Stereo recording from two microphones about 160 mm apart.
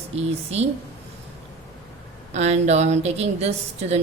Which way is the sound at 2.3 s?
45° right (ahead or behind).